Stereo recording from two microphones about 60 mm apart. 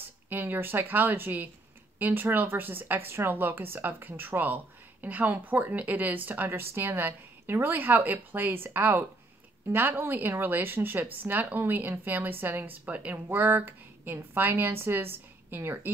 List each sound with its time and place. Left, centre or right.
0.3 s speech: right